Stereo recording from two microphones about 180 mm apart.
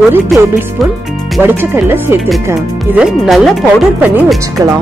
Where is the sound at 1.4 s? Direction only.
10° right (ahead or behind).